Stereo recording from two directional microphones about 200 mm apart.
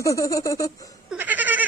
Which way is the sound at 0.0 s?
15° left (ahead or behind).